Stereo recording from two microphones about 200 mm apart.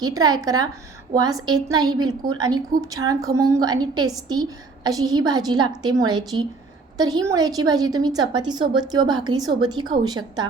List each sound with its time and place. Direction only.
0.0 s a woman's voice: 20° right (ahead or behind)